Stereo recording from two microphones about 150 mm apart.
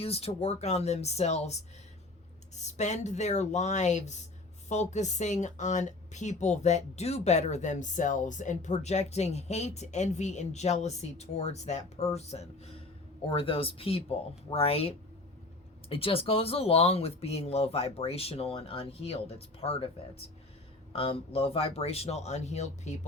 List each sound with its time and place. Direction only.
0.0 s speech: 40° left (ahead or behind)
20.9 s speech: 40° left (ahead or behind)